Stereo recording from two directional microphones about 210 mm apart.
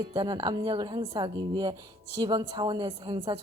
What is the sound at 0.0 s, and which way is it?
A woman's voice, 20° right (ahead or behind).